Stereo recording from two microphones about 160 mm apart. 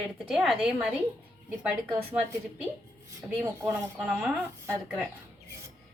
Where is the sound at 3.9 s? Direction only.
Centre (ahead or behind).